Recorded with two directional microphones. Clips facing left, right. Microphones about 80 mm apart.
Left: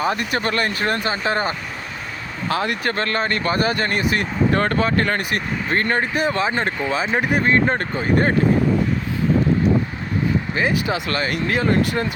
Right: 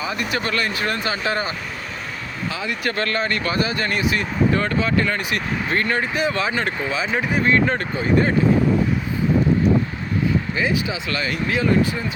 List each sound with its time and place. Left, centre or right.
0.0 s speech: left
2.5 s speech: left
2.8 s speech: left
7.2 s speech: left
7.4 s speech: left
10.5 s speech: left
11.8 s speech: left